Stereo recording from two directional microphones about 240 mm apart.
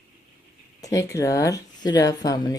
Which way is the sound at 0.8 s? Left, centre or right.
Centre.